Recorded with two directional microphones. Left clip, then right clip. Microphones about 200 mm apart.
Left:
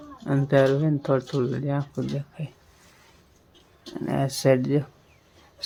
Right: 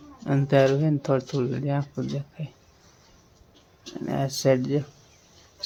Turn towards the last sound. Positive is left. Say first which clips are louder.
# left 1 dB
turn(degrees=5)  # may be behind; listen again after turning